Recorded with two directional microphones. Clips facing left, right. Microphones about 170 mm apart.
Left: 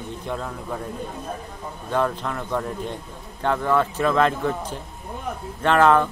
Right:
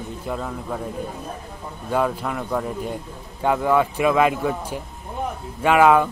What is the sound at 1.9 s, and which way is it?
Speech, 5° right (ahead or behind).